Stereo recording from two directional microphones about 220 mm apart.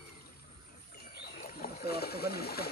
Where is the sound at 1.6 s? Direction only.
45° left (ahead or behind).